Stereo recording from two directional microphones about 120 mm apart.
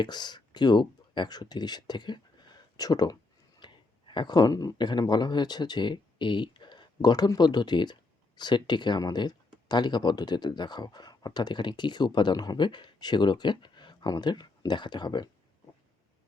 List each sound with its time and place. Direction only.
0.0 s speech: 35° left (ahead or behind)